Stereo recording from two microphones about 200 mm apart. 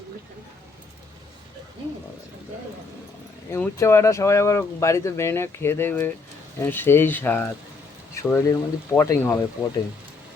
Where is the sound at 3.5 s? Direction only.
15° left (ahead or behind).